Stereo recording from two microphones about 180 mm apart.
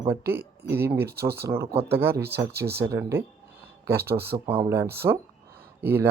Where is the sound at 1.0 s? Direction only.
60° right (ahead or behind).